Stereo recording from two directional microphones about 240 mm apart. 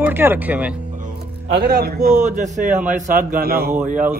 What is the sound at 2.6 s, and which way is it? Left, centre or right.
Speech, centre.